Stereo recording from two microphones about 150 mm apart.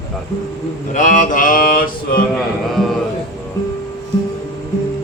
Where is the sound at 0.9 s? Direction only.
60° left (ahead or behind); by 2.2 s 75° left (ahead or behind).